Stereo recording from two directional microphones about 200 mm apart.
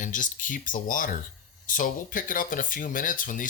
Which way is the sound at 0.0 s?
40° left (ahead or behind).